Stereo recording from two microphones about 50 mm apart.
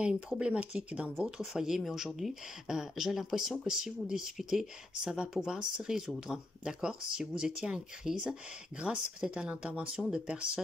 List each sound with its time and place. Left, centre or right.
0.0 s speech: centre
1.2 s speech: centre
9.9 s speech: centre